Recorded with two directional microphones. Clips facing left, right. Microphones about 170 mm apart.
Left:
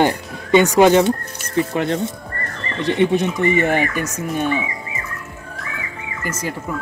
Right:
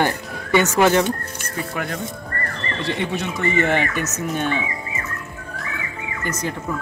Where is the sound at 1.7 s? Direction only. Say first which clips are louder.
Left 7 dB; 25° left (ahead or behind); by 4.6 s 10° left (ahead or behind).